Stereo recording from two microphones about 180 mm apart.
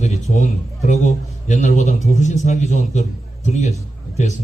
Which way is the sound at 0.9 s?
40° left (ahead or behind).